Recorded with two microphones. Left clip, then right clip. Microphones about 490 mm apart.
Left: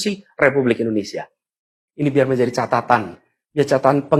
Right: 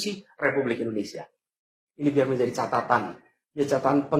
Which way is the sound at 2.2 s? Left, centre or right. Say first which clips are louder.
Left 7 dB; left.